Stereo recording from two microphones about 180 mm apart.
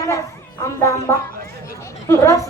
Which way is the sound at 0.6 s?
15° left (ahead or behind).